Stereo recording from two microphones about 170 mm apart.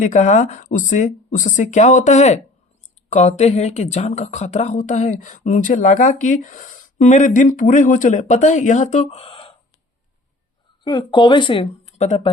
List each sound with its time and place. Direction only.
0.0 s speech: 45° left (ahead or behind)
10.8 s speech: 25° left (ahead or behind)